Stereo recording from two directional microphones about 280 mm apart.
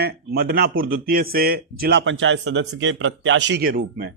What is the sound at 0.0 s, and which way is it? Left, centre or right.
A man's voice, right.